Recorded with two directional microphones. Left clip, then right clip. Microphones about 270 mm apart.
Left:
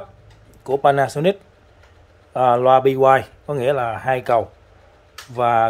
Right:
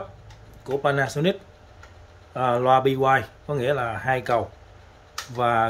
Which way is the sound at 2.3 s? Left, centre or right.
Centre.